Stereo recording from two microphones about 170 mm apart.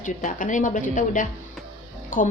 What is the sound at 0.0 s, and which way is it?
Speech, 50° left (ahead or behind).